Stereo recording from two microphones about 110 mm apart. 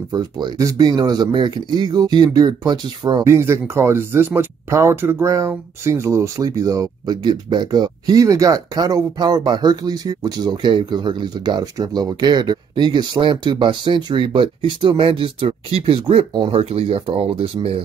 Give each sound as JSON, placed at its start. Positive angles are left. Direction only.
{"t": 0.1, "sound": "speech", "side_deg": -35}
{"t": 3.3, "sound": "speech", "side_deg": -25}
{"t": 16.6, "sound": "speech", "side_deg": -65}